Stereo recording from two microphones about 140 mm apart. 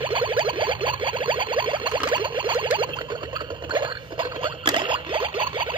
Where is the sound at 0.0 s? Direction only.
35° right (ahead or behind).